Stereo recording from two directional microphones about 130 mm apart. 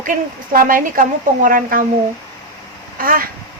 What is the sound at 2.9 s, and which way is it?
Speech, 90° right.